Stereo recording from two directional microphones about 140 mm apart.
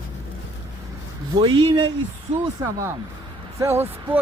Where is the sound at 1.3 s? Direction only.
35° right (ahead or behind).